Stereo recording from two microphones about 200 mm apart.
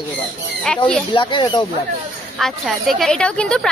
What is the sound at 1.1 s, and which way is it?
Music, 25° left (ahead or behind).